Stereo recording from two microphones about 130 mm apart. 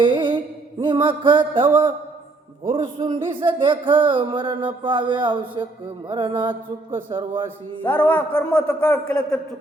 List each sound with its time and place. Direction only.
0.0 s a sound: 35° right (ahead or behind)
0.8 s speech: 40° right (ahead or behind)
7.9 s a man's voice: 10° left (ahead or behind)